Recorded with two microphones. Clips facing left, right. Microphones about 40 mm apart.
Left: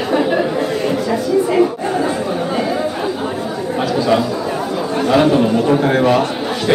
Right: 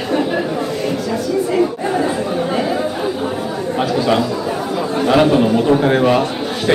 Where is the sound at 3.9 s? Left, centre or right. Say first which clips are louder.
Left 1 dB; centre.